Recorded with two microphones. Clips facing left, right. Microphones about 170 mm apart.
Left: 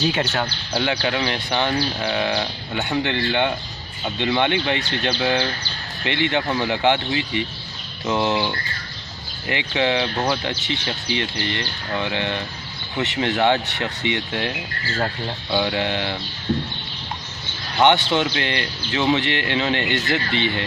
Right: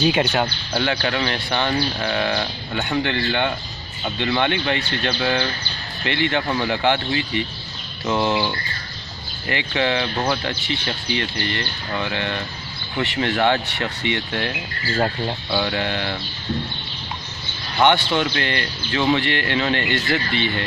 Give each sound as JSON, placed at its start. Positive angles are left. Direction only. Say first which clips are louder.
{"t": 0.0, "sound": "speech", "louder": "right 3 dB", "side_deg": -15}
{"t": 0.7, "sound": "speech", "louder": "even", "side_deg": 10}
{"t": 9.5, "sound": "speech", "louder": "even", "side_deg": 15}
{"t": 15.5, "sound": "speech", "louder": "left 3 dB", "side_deg": 15}
{"t": 17.8, "sound": "speech", "louder": "left 1 dB", "side_deg": 20}